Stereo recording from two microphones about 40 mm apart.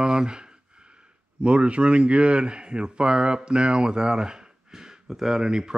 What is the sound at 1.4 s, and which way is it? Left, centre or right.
Speech, right.